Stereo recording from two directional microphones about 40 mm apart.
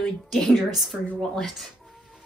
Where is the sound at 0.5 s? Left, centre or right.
Centre.